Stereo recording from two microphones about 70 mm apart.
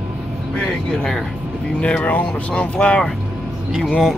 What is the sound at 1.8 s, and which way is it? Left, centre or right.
Speech, centre.